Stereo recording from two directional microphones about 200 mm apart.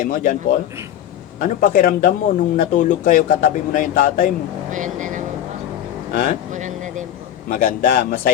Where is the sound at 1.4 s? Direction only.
45° left (ahead or behind).